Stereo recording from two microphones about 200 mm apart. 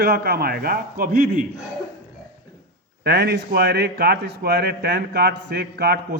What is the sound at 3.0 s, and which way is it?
A man's voice, 55° right (ahead or behind).